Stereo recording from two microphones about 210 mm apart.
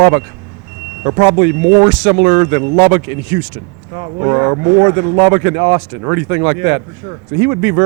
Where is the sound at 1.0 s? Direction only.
15° right (ahead or behind).